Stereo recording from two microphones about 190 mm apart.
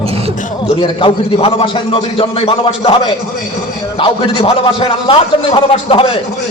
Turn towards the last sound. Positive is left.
turn(degrees=30)  # may be behind; listen again after turning